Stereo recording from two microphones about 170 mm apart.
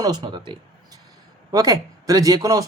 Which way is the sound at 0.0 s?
25° right (ahead or behind).